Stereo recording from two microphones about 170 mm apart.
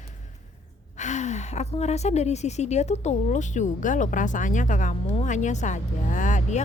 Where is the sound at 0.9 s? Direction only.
45° left (ahead or behind).